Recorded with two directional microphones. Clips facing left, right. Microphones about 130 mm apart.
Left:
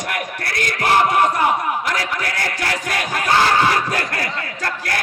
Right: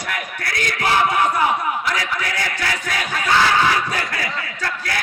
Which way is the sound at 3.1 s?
40° left (ahead or behind).